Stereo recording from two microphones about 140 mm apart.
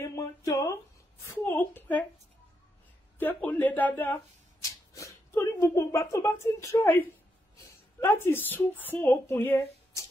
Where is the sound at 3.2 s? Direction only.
10° left (ahead or behind).